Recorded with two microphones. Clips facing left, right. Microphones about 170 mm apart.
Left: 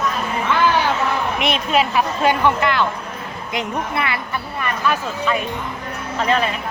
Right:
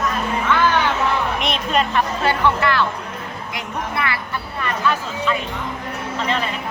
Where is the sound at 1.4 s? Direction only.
5° left (ahead or behind).